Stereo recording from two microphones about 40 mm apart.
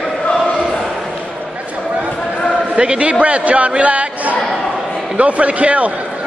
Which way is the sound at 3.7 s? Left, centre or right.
Right.